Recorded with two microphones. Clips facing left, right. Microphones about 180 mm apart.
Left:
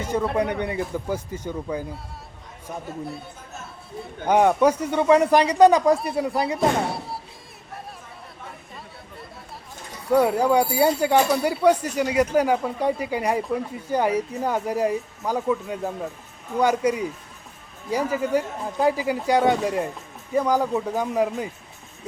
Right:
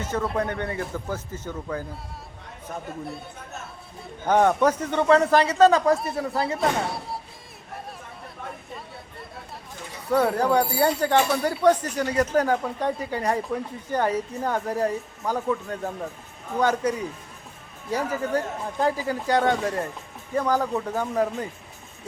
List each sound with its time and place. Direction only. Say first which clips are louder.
0.0 s speech: left 3 dB; 10° left (ahead or behind)
4.3 s speech: left 2 dB; 10° left (ahead or behind)
10.1 s speech: left 3 dB; 10° left (ahead or behind)